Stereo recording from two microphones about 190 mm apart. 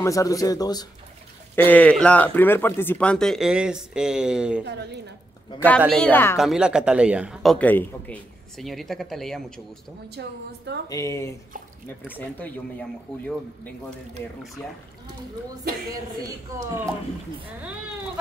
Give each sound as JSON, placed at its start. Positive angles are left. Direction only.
{"t": 0.0, "sound": "speech", "side_deg": 15}
{"t": 1.5, "sound": "speech", "side_deg": 10}
{"t": 4.6, "sound": "a woman's voice", "side_deg": -60}
{"t": 5.9, "sound": "speech", "side_deg": 5}
{"t": 6.3, "sound": "speech", "side_deg": 0}
{"t": 7.5, "sound": "speech", "side_deg": 10}
{"t": 10.1, "sound": "a woman's voice", "side_deg": -60}
{"t": 10.9, "sound": "speech", "side_deg": 15}
{"t": 16.5, "sound": "speech", "side_deg": -15}